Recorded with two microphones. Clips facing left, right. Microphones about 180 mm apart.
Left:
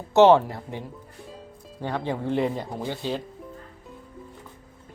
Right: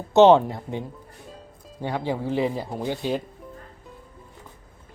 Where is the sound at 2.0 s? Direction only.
5° right (ahead or behind).